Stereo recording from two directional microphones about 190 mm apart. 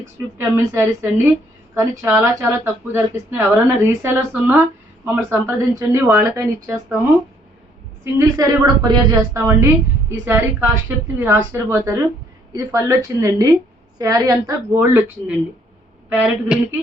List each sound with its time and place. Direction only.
0.3 s a woman's voice: 10° right (ahead or behind)
8.0 s a woman's voice: 15° right (ahead or behind)